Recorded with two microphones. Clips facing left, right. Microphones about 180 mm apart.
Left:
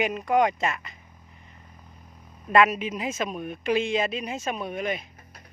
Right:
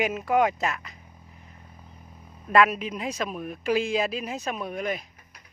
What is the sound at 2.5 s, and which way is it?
Speech, centre (ahead or behind).